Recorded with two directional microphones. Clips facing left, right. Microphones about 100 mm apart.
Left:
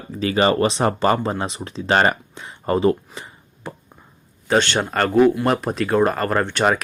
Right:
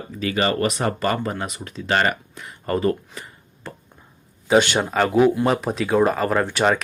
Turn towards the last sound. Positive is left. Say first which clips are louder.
# even
turn(degrees=-5)  # may be behind; listen again after turning